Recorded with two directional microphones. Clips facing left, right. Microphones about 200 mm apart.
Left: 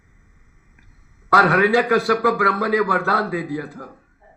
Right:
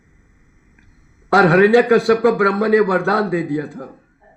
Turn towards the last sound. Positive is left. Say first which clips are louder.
# right 5 dB
turn(degrees=-25)  # may be behind; listen again after turning